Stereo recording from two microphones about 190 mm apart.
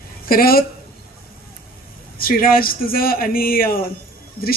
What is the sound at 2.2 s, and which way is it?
Speech, 50° left (ahead or behind).